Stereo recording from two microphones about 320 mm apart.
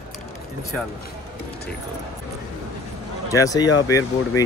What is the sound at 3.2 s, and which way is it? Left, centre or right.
Speech, centre.